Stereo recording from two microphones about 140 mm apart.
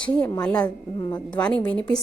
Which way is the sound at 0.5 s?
30° left (ahead or behind).